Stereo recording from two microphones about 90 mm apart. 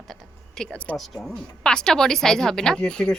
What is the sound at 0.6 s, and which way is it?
Speech, 15° left (ahead or behind).